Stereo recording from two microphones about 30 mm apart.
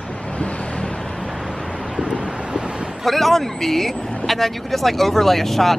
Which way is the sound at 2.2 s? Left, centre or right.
Right.